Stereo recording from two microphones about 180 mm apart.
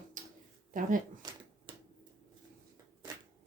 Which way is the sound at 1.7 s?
25° right (ahead or behind).